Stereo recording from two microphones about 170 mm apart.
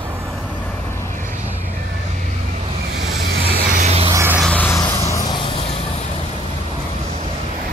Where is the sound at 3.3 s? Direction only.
60° right (ahead or behind).